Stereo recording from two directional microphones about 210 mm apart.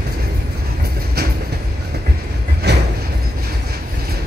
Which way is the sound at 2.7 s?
55° right (ahead or behind).